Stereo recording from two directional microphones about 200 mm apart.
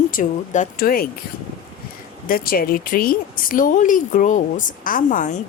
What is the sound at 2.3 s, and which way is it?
Speech, 45° left (ahead or behind).